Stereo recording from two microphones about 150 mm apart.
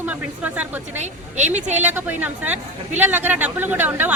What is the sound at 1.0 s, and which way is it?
Speech, 50° right (ahead or behind).